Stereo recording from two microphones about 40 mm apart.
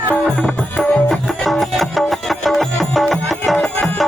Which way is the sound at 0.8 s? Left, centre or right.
Centre.